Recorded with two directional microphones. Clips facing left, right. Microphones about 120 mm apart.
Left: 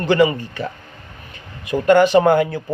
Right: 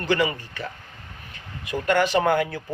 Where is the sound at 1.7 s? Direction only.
25° left (ahead or behind).